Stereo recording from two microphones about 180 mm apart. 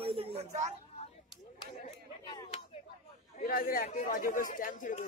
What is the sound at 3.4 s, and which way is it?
Speech, 55° left (ahead or behind).